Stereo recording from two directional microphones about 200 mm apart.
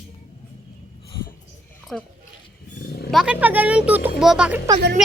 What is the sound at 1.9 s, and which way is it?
Speech, 5° left (ahead or behind).